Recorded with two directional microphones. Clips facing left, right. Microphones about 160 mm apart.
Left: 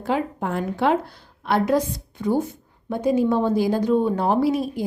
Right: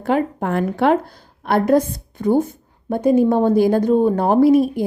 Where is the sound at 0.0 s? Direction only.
55° right (ahead or behind).